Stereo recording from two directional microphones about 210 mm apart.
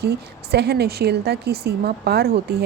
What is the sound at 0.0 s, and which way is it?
Speech, 50° right (ahead or behind).